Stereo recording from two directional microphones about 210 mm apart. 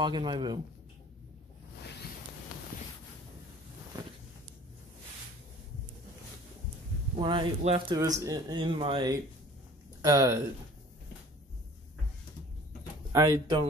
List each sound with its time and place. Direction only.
0.0 s speech: 20° right (ahead or behind)
7.2 s speech: 25° right (ahead or behind)
13.1 s speech: 15° right (ahead or behind)